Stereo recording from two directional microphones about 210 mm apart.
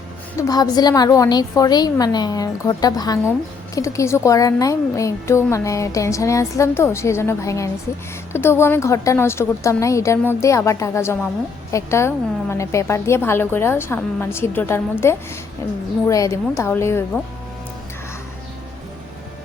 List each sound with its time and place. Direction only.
0.3 s a woman's voice: 15° left (ahead or behind)